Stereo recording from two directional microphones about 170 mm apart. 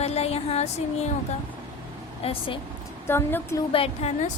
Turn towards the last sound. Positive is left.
turn(degrees=35)  # may be behind; listen again after turning